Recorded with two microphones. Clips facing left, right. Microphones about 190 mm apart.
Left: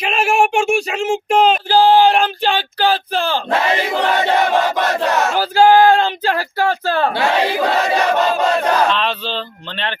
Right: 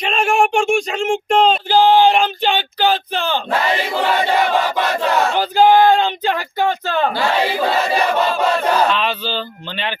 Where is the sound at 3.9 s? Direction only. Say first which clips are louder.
Even; 25° left (ahead or behind).